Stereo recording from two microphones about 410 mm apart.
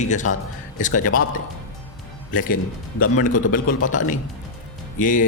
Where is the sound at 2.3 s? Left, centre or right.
Centre.